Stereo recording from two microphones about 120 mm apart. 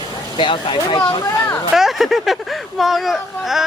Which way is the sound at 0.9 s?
30° left (ahead or behind).